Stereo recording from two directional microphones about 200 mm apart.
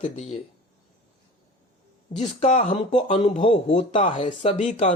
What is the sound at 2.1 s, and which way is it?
Speech, 35° left (ahead or behind).